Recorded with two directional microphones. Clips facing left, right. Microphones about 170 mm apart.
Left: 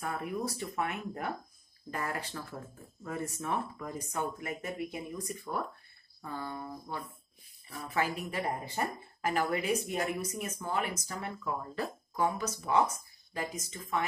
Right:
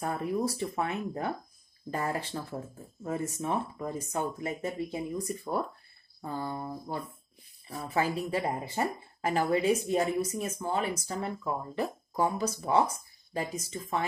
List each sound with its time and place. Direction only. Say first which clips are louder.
0.0 s speech: right 5 dB; 30° right (ahead or behind)